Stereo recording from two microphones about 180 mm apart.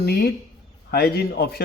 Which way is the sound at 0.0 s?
60° left (ahead or behind).